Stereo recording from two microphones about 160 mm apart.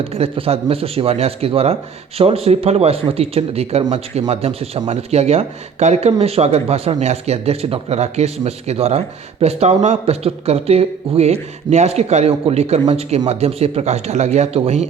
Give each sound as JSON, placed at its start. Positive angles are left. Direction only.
{"t": 0.0, "sound": "speech", "side_deg": -35}